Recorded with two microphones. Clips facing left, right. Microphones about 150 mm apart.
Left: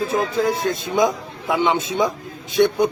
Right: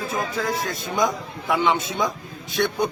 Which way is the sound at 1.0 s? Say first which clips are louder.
Left 3 dB; 15° left (ahead or behind).